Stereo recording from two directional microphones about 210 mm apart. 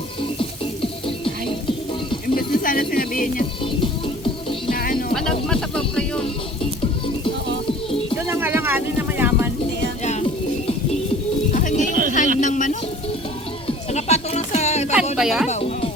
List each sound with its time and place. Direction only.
0.2 s music: 25° left (ahead or behind)
2.3 s speech: 45° left (ahead or behind)
3.6 s music: 25° left (ahead or behind)
4.7 s music: 45° left (ahead or behind)
5.1 s music: centre (ahead or behind)
8.3 s music: 10° right (ahead or behind)
10.0 s music: 35° left (ahead or behind)
11.5 s music: 35° left (ahead or behind)
11.9 s a sound: 40° right (ahead or behind)
12.4 s a sound: 35° left (ahead or behind)
13.7 s music: 30° left (ahead or behind)
15.1 s music: centre (ahead or behind)
15.4 s music: 30° left (ahead or behind)